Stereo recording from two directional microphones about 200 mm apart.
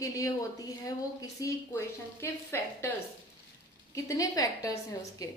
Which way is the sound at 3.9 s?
15° left (ahead or behind).